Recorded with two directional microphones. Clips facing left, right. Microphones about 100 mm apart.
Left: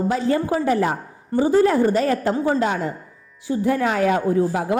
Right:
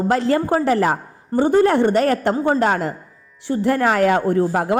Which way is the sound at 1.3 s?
40° right (ahead or behind).